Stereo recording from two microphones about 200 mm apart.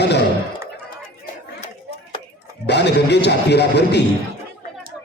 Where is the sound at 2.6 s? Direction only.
55° left (ahead or behind).